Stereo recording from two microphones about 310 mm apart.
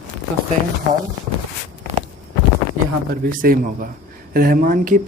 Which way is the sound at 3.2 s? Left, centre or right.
Right.